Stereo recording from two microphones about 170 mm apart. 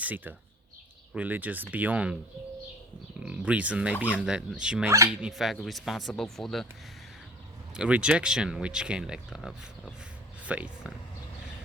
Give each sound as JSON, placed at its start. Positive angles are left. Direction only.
{"t": 0.0, "sound": "speech", "side_deg": -10}
{"t": 3.2, "sound": "speech", "side_deg": -5}
{"t": 4.9, "sound": "speech", "side_deg": -20}
{"t": 5.1, "sound": "speech", "side_deg": -5}
{"t": 7.7, "sound": "speech", "side_deg": -5}